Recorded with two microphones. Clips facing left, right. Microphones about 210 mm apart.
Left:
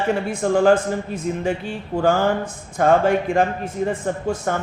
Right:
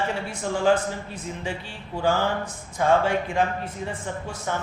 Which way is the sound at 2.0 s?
50° left (ahead or behind).